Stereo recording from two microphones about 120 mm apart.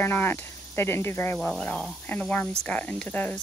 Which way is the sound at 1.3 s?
Centre (ahead or behind).